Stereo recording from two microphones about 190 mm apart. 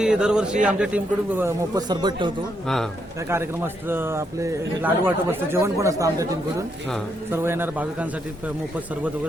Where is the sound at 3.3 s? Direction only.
10° right (ahead or behind).